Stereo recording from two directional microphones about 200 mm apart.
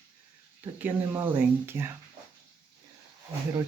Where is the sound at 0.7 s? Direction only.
10° right (ahead or behind).